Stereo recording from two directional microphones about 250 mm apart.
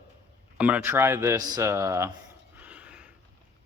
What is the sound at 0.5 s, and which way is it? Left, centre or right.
Speech, centre.